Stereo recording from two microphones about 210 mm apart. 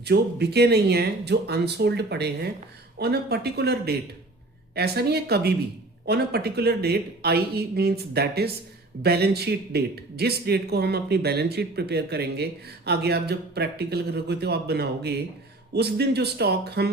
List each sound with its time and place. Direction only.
0.0 s a man's voice: 50° right (ahead or behind)